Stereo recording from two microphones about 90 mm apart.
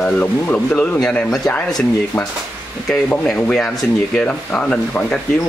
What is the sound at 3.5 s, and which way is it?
Speech, 5° left (ahead or behind).